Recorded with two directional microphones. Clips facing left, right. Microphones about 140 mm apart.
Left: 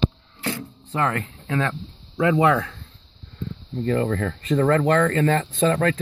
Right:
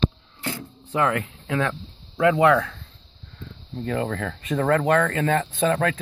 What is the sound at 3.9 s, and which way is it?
Speech, 5° right (ahead or behind).